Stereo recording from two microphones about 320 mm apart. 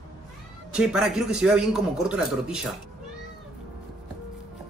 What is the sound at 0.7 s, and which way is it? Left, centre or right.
A man's voice, centre.